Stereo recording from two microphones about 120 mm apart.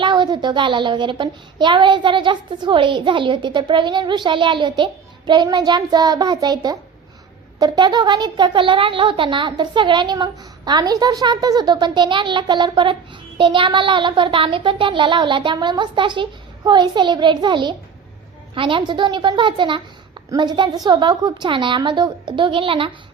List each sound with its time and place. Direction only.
0.0 s a child's voice: 40° right (ahead or behind)